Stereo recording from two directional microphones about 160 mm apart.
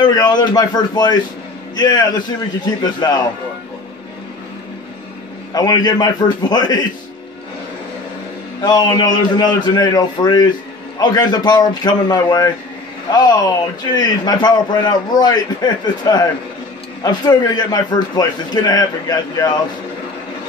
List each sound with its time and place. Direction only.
0.0 s a man's voice: 25° left (ahead or behind)
5.5 s a man's voice: 25° left (ahead or behind)
8.6 s a man's voice: 25° left (ahead or behind)